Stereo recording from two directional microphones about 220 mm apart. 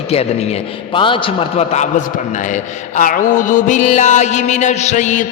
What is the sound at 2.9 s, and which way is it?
Music, 35° left (ahead or behind).